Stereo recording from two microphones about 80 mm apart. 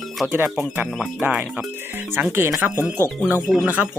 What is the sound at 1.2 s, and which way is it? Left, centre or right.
Speech, centre.